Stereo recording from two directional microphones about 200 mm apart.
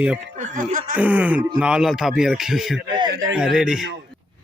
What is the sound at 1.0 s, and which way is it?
A man's voice, 5° right (ahead or behind).